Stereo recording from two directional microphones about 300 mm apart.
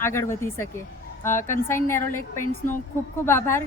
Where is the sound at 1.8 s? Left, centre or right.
Centre.